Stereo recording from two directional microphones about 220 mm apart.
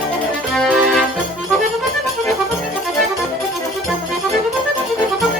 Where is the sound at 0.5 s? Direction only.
Centre (ahead or behind).